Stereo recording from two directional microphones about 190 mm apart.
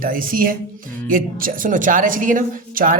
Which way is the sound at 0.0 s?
50° right (ahead or behind).